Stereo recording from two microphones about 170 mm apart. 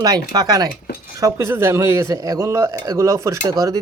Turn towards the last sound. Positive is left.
turn(degrees=-15)  # may be behind; listen again after turning